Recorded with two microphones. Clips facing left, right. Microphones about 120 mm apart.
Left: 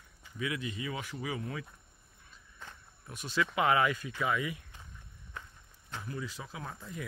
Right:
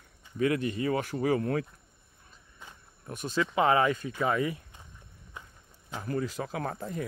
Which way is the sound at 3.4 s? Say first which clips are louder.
Right 3 dB; 30° right (ahead or behind).